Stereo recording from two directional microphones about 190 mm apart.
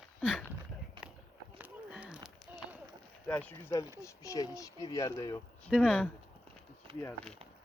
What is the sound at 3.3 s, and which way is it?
Speech, 10° left (ahead or behind).